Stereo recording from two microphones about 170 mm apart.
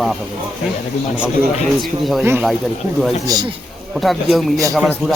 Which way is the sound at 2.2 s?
15° right (ahead or behind).